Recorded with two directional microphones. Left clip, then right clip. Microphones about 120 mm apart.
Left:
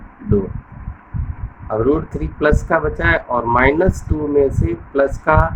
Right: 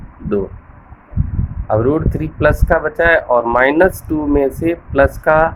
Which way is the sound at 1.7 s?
55° right (ahead or behind).